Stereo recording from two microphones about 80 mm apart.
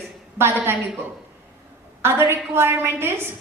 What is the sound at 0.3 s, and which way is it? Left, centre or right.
Speech, right.